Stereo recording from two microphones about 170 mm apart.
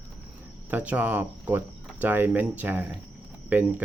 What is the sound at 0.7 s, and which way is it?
Speech, 10° right (ahead or behind).